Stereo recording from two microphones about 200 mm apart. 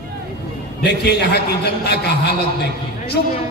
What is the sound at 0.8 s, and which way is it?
A man's voice, 55° left (ahead or behind).